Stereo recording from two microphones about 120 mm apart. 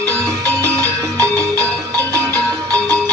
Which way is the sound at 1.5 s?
25° right (ahead or behind).